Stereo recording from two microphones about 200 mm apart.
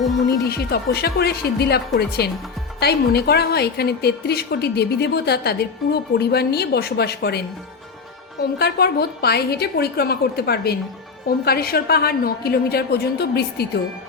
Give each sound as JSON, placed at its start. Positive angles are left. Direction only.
{"t": 0.3, "sound": "a woman's voice", "side_deg": 50}
{"t": 8.5, "sound": "a woman's voice", "side_deg": 50}